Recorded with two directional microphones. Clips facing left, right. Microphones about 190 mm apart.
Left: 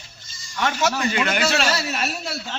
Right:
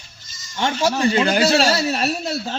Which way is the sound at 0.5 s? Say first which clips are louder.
Right 2 dB; 30° right (ahead or behind).